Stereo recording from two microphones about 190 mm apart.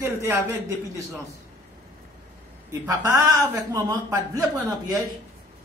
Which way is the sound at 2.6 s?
15° right (ahead or behind).